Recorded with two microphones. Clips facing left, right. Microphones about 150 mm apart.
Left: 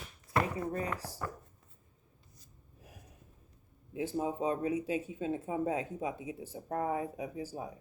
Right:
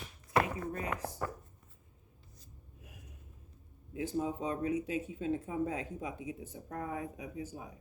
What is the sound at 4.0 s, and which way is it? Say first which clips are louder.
Speech: left 1 dB; 25° left (ahead or behind).